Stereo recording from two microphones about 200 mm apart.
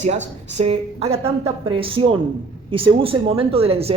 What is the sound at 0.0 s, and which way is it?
A woman's voice, 35° right (ahead or behind).